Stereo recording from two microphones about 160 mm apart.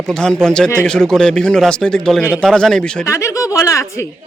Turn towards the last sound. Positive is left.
turn(degrees=20)  # may be behind; listen again after turning